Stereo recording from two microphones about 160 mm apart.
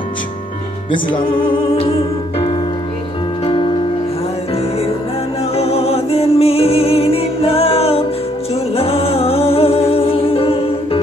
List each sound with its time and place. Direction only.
1.3 s music: 35° left (ahead or behind)
5.6 s music: 40° left (ahead or behind)